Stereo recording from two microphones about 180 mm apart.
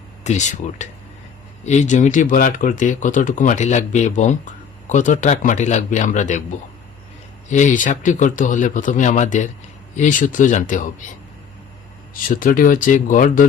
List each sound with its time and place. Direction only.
0.3 s speech: 40° left (ahead or behind)
7.5 s speech: 45° left (ahead or behind)
12.1 s speech: 50° left (ahead or behind)